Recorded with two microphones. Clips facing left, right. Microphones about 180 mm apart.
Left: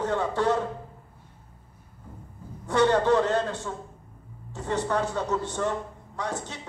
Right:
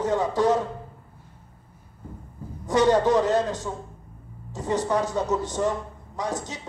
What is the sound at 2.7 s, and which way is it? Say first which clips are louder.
Speech: right 2 dB; 15° right (ahead or behind).